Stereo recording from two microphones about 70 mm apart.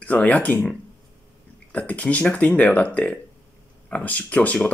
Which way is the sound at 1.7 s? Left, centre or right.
Centre.